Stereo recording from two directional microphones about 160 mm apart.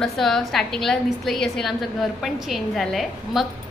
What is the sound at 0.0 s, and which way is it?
A woman's voice, centre (ahead or behind).